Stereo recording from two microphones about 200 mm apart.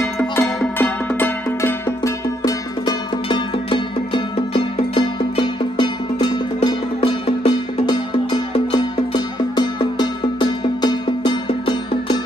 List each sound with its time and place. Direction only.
0.0 s music: 10° left (ahead or behind)